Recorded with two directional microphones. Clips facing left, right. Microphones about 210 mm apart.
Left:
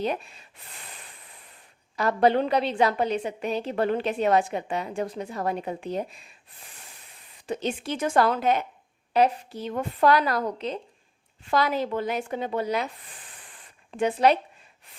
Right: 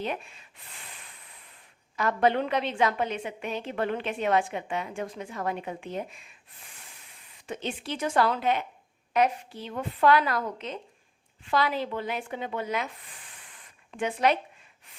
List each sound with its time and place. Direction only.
0.0 s a woman's voice: 35° left (ahead or behind)
2.0 s a woman's voice: 35° left (ahead or behind)
7.4 s a woman's voice: 35° left (ahead or behind)
13.9 s a woman's voice: 35° left (ahead or behind)